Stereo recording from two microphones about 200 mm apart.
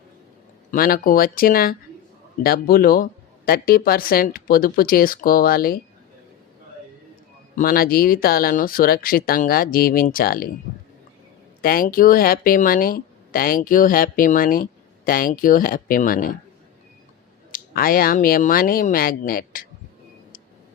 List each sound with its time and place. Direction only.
0.7 s speech: 45° left (ahead or behind)
7.5 s speech: 45° left (ahead or behind)
11.6 s speech: 45° left (ahead or behind)
17.5 s speech: 45° left (ahead or behind)